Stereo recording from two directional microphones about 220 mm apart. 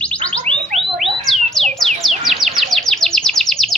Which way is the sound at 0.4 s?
25° right (ahead or behind).